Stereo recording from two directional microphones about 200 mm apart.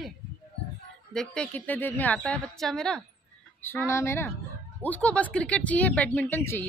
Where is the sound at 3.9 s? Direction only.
15° left (ahead or behind).